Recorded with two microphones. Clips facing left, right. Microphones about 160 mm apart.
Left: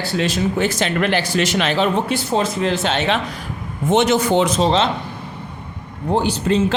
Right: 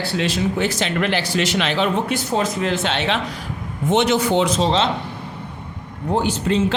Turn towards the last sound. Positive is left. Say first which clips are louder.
# left 2 dB
turn(degrees=40)  # may be behind; listen again after turning